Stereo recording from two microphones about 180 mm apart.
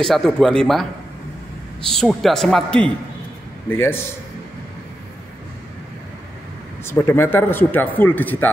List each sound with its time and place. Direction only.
0.0 s a man's voice: centre (ahead or behind)
1.9 s a man's voice: centre (ahead or behind)
6.9 s speech: 15° left (ahead or behind)